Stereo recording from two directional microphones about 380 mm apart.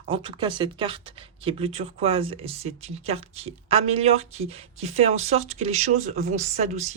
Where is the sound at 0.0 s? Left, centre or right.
Centre.